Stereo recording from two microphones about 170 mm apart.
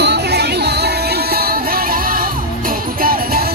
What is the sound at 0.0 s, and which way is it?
Music, 80° right.